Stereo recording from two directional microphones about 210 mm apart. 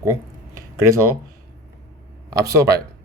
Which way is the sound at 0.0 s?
15° right (ahead or behind).